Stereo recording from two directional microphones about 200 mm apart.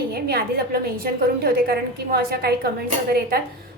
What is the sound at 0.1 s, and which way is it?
A woman's voice, 50° right (ahead or behind).